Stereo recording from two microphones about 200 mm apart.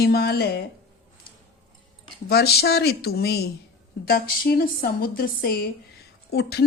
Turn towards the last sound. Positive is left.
turn(degrees=55)  # may be behind; listen again after turning